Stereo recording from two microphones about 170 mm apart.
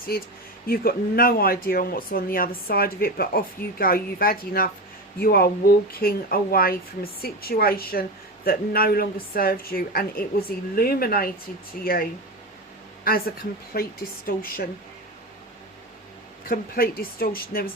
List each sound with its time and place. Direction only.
0.1 s speech: 65° left (ahead or behind)
13.1 s speech: 60° left (ahead or behind)
16.5 s speech: 60° left (ahead or behind)